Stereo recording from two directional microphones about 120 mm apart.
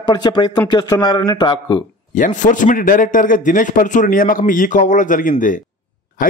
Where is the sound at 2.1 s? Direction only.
90° left.